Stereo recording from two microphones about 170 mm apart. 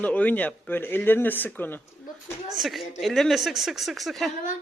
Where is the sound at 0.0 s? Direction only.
10° left (ahead or behind).